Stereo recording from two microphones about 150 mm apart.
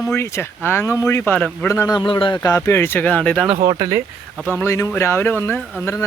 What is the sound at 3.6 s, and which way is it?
Speech, 25° right (ahead or behind).